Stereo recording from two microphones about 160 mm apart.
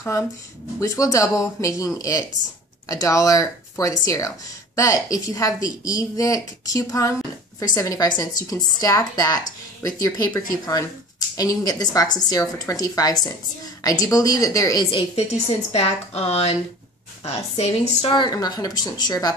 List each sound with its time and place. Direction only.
0.7 s speech: 20° left (ahead or behind)